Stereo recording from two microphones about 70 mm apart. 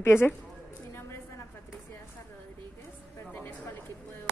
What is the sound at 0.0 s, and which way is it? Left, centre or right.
Speech, left.